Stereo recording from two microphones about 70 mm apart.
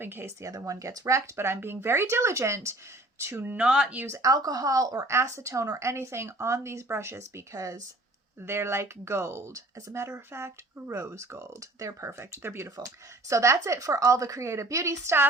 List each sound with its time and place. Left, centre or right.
0.0 s speech: right
0.3 s a woman's voice: right
3.5 s speech: centre
4.0 s a woman's voice: right
4.3 s a woman's voice: right
8.4 s a woman's voice: right